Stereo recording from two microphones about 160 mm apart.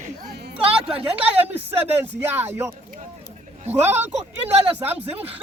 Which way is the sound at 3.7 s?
15° right (ahead or behind).